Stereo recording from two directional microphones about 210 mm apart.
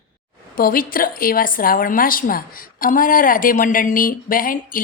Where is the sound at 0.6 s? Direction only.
45° left (ahead or behind).